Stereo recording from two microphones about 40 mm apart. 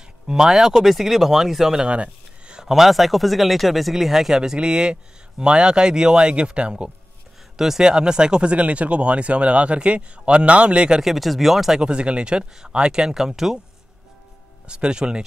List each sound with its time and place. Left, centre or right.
0.3 s speech: centre
1.8 s a sound: right
2.6 s speech: centre
4.4 s speech: centre
7.5 s speech: centre; by 11.0 s right
11.0 s speech: centre
11.8 s speech: right
14.7 s speech: right